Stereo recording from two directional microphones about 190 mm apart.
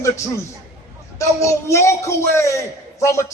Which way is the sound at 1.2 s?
15° left (ahead or behind).